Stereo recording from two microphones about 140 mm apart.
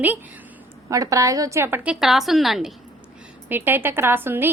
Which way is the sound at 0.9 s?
25° right (ahead or behind).